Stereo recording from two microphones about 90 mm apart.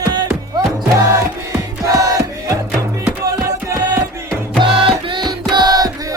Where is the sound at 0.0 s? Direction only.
50° right (ahead or behind).